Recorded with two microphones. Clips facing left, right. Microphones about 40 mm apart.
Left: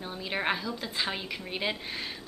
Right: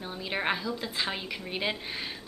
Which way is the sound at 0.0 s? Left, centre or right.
Centre.